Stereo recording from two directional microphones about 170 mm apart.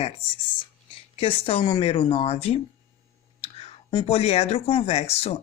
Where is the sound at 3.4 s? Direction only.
35° left (ahead or behind).